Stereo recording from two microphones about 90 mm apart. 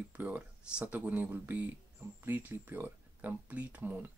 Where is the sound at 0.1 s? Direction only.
15° right (ahead or behind).